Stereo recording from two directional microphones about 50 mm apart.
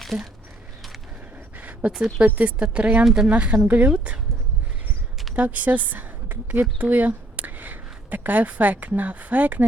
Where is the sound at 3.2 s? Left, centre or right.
Right.